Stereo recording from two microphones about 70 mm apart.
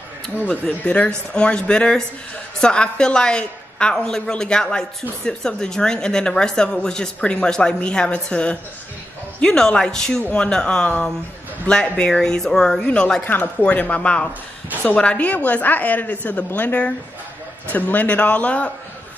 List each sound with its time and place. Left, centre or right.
0.5 s speech: centre
13.2 s a woman's voice: left